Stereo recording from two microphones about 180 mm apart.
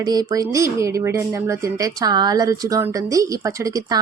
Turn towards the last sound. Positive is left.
turn(degrees=-20)  # may be behind; listen again after turning